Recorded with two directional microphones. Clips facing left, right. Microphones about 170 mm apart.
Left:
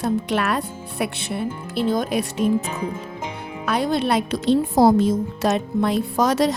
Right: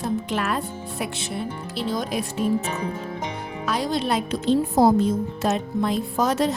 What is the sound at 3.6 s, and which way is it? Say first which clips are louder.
Speech: left 4 dB; 60° left (ahead or behind).